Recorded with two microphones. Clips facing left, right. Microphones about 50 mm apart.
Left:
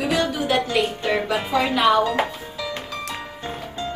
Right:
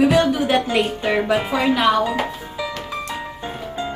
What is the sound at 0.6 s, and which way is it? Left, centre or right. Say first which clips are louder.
Speech: right 2 dB; centre.